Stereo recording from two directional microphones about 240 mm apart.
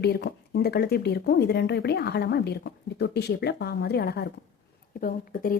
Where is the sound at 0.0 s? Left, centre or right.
Left.